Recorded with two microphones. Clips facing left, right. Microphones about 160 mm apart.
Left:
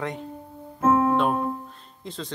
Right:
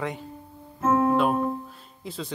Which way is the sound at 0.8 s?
35° left (ahead or behind).